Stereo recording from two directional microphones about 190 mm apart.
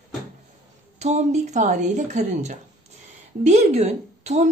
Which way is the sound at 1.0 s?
35° right (ahead or behind).